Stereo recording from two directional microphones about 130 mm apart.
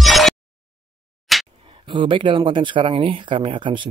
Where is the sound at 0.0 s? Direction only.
Centre (ahead or behind).